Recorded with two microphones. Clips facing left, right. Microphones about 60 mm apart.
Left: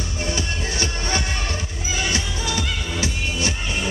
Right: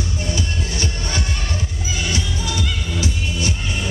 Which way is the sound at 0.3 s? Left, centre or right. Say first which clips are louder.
Left 2 dB; left.